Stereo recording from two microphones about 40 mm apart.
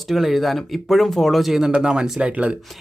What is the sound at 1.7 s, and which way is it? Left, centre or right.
Speech, right.